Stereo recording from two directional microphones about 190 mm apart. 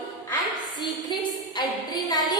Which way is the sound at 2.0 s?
20° left (ahead or behind).